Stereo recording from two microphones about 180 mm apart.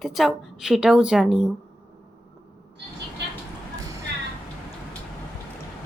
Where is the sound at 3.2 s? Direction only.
70° right (ahead or behind).